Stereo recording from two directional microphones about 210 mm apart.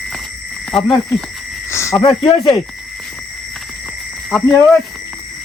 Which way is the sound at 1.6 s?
15° left (ahead or behind).